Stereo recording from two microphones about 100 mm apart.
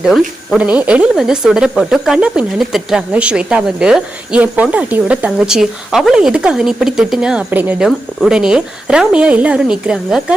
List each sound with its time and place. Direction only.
0.0 s speech: 5° right (ahead or behind)
7.8 s speech: 5° right (ahead or behind)